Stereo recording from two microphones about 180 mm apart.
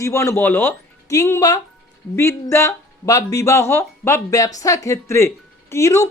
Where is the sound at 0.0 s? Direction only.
15° left (ahead or behind).